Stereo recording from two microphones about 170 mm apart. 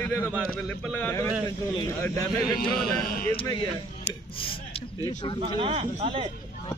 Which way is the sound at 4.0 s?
30° left (ahead or behind).